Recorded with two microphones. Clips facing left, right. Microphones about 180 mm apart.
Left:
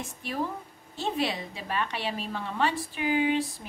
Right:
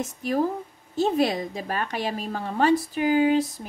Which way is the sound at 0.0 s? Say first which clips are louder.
Right 8 dB; 40° right (ahead or behind).